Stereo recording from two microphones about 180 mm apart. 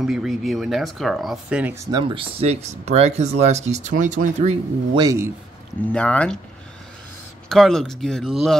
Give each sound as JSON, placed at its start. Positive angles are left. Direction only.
{"t": 0.0, "sound": "speech", "side_deg": 0}
{"t": 4.9, "sound": "speech", "side_deg": -20}
{"t": 5.9, "sound": "speech", "side_deg": 5}
{"t": 7.4, "sound": "speech", "side_deg": 0}